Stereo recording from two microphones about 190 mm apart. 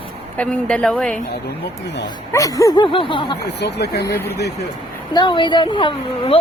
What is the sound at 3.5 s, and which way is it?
Speech, 65° left (ahead or behind).